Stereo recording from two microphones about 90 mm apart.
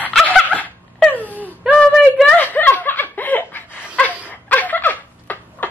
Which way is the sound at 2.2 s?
15° left (ahead or behind).